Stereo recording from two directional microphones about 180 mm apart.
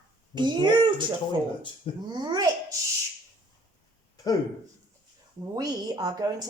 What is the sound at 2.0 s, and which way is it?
Speech, 25° right (ahead or behind).